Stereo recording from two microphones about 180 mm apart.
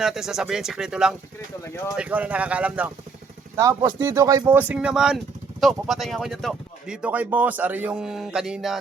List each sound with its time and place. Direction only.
0.0 s speech: centre (ahead or behind)
1.6 s speech: 15° left (ahead or behind)
2.0 s speech: 10° right (ahead or behind)
3.6 s speech: 20° right (ahead or behind); by 8.8 s centre (ahead or behind)